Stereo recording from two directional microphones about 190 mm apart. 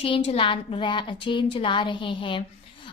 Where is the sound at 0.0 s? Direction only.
30° left (ahead or behind).